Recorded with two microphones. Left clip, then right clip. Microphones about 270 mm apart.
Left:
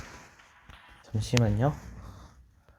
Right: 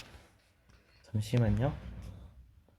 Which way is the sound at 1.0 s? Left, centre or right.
Centre.